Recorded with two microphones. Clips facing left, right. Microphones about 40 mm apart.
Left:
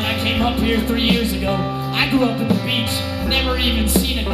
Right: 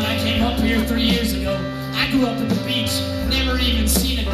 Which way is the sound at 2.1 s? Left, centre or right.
Left.